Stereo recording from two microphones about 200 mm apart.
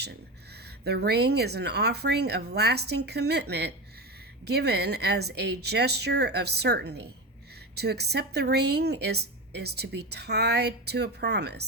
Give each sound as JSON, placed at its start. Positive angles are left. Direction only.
{"t": 0.9, "sound": "a woman's voice", "side_deg": -55}